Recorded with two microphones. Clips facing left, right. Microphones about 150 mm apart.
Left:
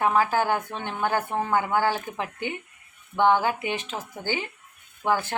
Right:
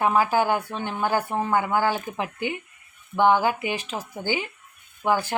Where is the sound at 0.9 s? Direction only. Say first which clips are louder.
Right 1 dB; 30° right (ahead or behind).